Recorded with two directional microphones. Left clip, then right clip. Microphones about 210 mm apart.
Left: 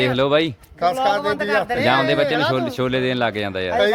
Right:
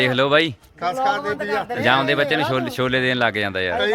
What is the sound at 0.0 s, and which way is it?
Speech, 5° left (ahead or behind).